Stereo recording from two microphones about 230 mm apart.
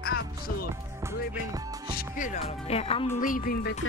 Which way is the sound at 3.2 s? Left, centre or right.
Left.